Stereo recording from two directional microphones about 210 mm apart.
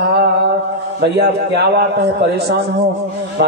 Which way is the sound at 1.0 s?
50° right (ahead or behind).